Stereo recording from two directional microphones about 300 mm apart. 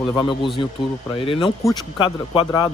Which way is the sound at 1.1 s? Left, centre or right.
Centre.